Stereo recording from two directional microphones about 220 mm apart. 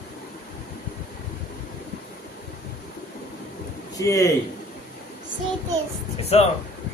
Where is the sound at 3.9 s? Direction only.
15° left (ahead or behind).